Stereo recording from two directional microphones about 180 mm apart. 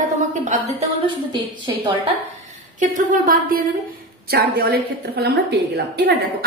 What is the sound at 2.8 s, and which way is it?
A woman's voice, 45° right (ahead or behind).